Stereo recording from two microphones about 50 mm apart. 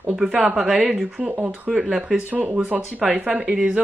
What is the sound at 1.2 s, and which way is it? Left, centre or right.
Speech, right.